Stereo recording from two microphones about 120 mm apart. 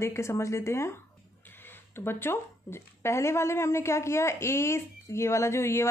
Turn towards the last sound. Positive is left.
turn(degrees=20)  # may be behind; listen again after turning